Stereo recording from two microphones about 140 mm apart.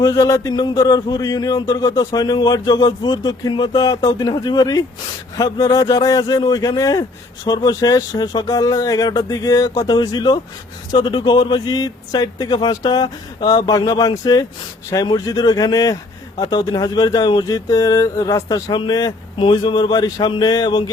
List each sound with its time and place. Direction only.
0.0 s speech: 25° left (ahead or behind)